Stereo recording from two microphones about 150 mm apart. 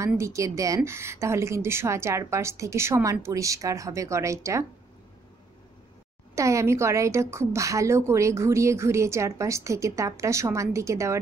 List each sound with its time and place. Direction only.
0.2 s a woman's voice: 20° right (ahead or behind)
6.3 s a woman's voice: 20° right (ahead or behind)